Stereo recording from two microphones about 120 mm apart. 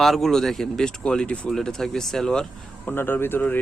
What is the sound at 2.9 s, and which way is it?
Speech, 15° left (ahead or behind).